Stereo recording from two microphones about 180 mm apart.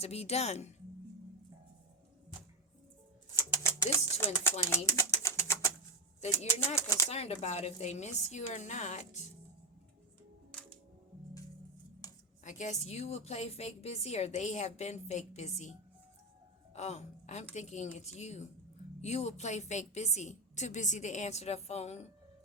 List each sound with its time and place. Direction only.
0.0 s a woman's voice: 35° left (ahead or behind)
3.3 s bird: 15° left (ahead or behind)
6.7 s speech: 15° left (ahead or behind)
7.1 s a woman's voice: 35° left (ahead or behind)
12.0 s a sound: 20° left (ahead or behind)
12.5 s a woman's voice: 40° left (ahead or behind)
16.7 s a woman's voice: 40° left (ahead or behind)